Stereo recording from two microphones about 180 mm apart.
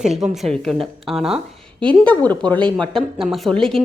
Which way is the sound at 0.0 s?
Centre (ahead or behind).